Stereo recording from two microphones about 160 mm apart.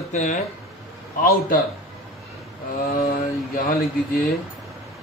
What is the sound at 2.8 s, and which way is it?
Speech, 60° left (ahead or behind).